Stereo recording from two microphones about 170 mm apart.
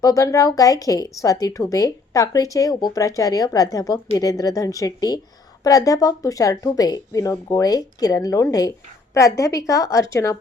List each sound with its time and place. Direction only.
0.0 s a woman's voice: 20° left (ahead or behind)